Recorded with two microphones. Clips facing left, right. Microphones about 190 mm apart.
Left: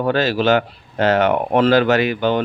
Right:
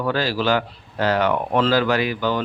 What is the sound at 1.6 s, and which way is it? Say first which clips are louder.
Speech: left 5 dB; 60° left (ahead or behind).